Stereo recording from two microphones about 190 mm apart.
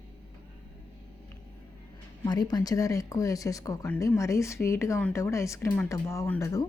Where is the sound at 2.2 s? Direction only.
20° left (ahead or behind).